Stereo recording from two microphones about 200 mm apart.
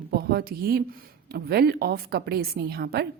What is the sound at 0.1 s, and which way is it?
A woman's voice, 50° right (ahead or behind).